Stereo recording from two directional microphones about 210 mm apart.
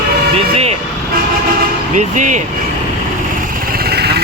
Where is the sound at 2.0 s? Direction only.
35° right (ahead or behind).